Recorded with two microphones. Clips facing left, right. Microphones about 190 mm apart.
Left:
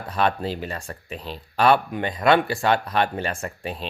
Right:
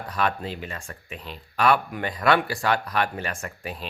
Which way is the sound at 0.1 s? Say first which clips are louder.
Left 4 dB; 30° left (ahead or behind).